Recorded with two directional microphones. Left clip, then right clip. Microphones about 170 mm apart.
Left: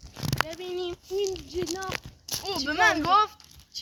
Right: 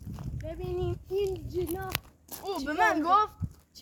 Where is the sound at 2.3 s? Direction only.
10° right (ahead or behind).